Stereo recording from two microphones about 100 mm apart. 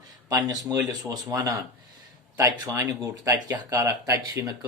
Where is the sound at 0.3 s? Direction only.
40° right (ahead or behind).